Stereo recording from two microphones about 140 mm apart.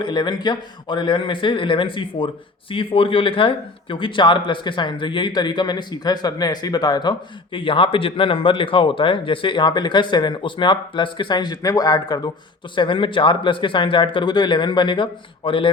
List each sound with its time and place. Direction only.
0.0 s speech: 30° left (ahead or behind)